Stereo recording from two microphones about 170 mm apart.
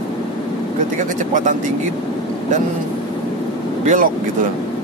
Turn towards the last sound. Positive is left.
turn(degrees=-45)  # may be behind; listen again after turning